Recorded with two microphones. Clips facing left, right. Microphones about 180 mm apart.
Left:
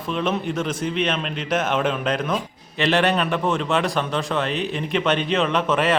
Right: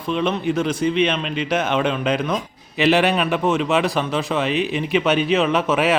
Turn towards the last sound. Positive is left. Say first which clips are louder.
# right 2 dB
turn(degrees=-5)  # may be behind; listen again after turning